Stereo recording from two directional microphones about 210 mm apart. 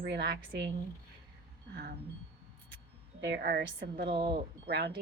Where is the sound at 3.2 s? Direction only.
50° right (ahead or behind).